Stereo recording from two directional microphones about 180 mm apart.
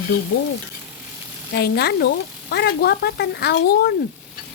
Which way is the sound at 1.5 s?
65° left (ahead or behind).